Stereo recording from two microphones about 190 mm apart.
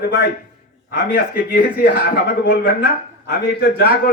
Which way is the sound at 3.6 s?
60° left (ahead or behind).